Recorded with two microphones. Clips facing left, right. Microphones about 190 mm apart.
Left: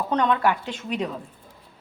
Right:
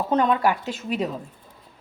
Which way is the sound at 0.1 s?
5° right (ahead or behind).